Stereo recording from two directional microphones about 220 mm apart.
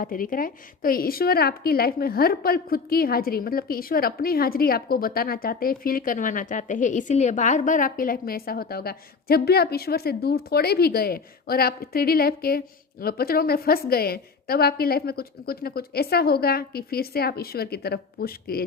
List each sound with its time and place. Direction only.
0.0 s a woman's voice: 40° left (ahead or behind)